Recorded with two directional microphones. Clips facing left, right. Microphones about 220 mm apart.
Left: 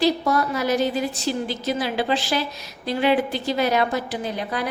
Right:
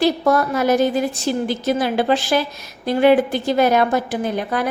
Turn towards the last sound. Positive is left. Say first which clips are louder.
# right 5 dB
turn(degrees=-50)  # may be behind; listen again after turning